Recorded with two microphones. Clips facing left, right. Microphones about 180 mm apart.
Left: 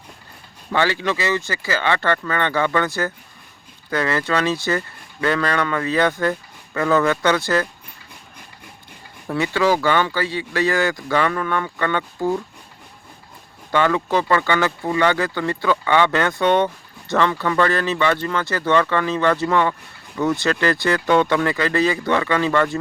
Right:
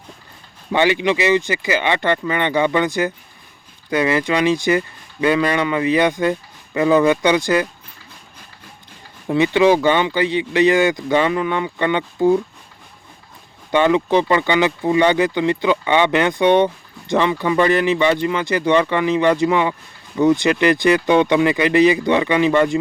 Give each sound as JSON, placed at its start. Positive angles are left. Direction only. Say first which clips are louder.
{"t": 0.7, "sound": "speech", "louder": "right 4 dB", "side_deg": -20}
{"t": 9.2, "sound": "speech", "louder": "right 5 dB", "side_deg": -20}
{"t": 13.7, "sound": "speech", "louder": "right 4 dB", "side_deg": -20}